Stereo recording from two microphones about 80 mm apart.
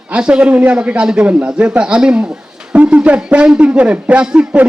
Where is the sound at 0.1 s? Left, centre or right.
Centre.